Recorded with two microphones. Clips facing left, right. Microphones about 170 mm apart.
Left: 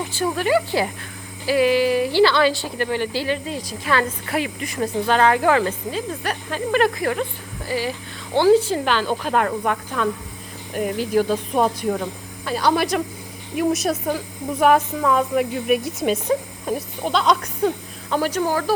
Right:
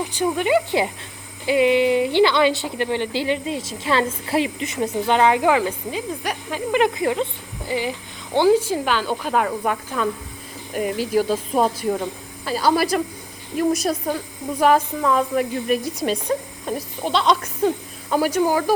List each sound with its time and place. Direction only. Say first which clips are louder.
0.1 s a woman's voice: even; 20° right (ahead or behind)